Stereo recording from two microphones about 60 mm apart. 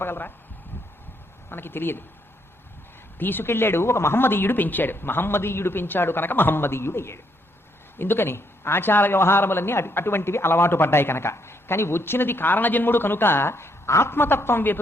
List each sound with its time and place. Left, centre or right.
0.0 s a man's voice: left
1.5 s speech: left
3.2 s a man's voice: left